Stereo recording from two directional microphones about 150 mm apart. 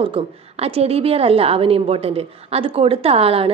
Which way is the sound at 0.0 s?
40° right (ahead or behind).